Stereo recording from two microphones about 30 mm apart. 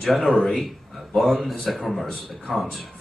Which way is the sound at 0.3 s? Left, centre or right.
Centre.